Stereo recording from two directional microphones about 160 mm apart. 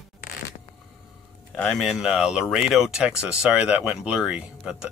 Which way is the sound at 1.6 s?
5° left (ahead or behind).